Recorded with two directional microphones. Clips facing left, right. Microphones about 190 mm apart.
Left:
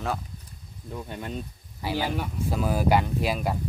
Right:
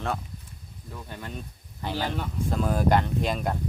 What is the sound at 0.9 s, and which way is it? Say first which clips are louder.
Speech: left 4 dB; 20° left (ahead or behind).